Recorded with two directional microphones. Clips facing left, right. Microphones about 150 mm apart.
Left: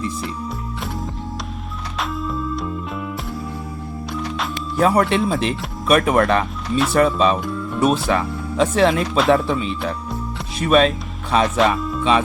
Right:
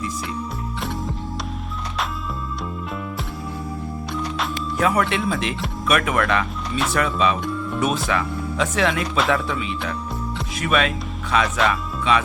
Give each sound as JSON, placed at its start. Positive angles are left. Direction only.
{"t": 4.1, "sound": "music", "side_deg": 0}
{"t": 4.8, "sound": "speech", "side_deg": 35}